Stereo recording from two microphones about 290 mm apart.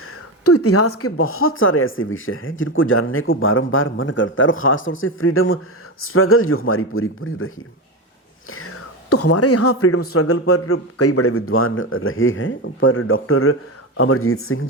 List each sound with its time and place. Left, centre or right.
0.4 s speech: left